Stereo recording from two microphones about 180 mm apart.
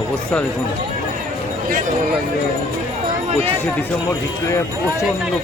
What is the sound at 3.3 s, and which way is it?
Speech, 35° right (ahead or behind).